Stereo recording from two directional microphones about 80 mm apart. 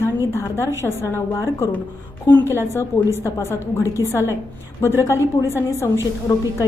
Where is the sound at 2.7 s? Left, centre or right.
Left.